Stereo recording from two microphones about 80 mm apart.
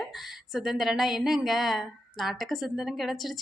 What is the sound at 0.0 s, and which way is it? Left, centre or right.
A woman's voice, centre.